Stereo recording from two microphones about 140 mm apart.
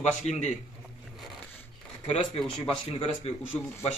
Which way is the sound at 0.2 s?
50° left (ahead or behind).